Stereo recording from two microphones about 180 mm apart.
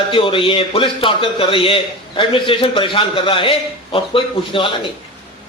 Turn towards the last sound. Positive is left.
turn(degrees=30)  # may be behind; listen again after turning